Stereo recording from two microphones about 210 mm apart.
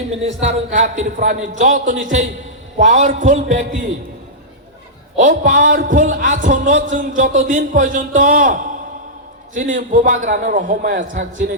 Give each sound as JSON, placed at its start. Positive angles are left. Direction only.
{"t": 0.3, "sound": "speech", "side_deg": -35}
{"t": 5.2, "sound": "speech", "side_deg": -35}